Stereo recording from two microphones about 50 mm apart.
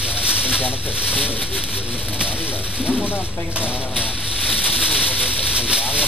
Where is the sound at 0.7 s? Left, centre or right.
Right.